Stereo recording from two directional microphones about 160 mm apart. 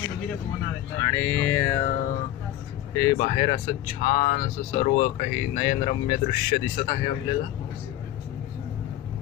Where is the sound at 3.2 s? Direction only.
40° left (ahead or behind).